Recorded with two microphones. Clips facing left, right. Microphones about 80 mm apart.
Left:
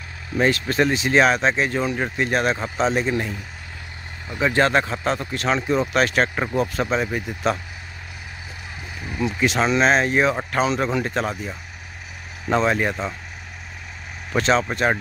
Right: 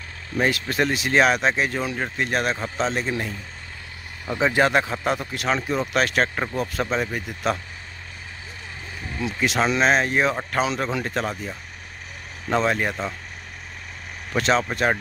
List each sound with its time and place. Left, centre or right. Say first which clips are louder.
0.4 s speech: left 3 dB; centre
4.3 s speech: right 1 dB; right
4.6 s speech: left 2 dB; centre
9.2 s speech: left 2 dB; centre
14.3 s speech: left 2 dB; centre